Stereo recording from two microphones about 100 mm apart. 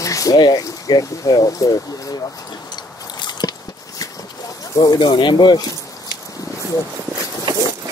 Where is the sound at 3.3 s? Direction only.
40° left (ahead or behind).